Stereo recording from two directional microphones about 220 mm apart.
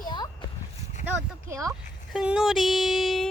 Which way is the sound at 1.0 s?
10° right (ahead or behind).